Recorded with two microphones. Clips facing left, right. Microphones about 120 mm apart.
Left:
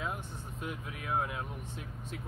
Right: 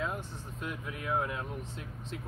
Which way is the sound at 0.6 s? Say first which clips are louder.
Right 2 dB; 5° left (ahead or behind).